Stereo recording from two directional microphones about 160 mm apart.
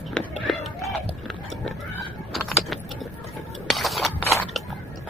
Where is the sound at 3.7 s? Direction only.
Centre (ahead or behind).